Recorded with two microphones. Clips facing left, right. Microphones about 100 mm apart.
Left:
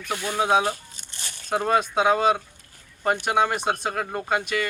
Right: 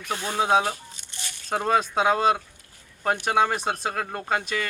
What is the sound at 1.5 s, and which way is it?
Speech, centre (ahead or behind).